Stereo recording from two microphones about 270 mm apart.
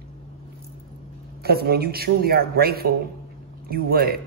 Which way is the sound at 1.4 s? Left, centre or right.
Right.